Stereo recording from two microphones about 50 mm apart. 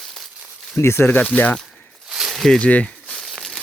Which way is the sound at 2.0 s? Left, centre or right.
Centre.